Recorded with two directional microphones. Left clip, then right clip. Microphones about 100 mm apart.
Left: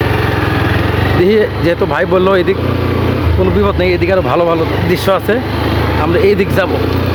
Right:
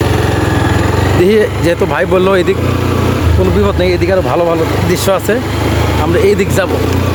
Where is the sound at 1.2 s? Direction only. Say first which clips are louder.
Right 1 dB; centre (ahead or behind).